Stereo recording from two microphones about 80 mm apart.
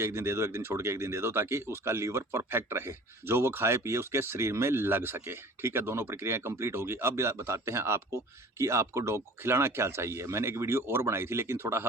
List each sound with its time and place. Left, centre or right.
0.0 s speech: right